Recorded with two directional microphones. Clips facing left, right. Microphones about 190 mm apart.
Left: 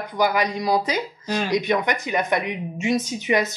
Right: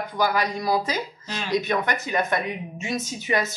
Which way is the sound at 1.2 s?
45° left (ahead or behind).